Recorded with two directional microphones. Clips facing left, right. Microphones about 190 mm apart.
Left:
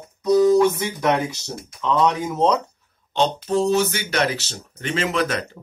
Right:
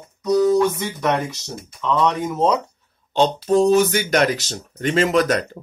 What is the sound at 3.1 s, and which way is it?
Speech, 35° right (ahead or behind).